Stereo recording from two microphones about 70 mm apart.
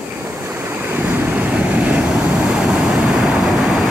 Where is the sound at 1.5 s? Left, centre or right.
Centre.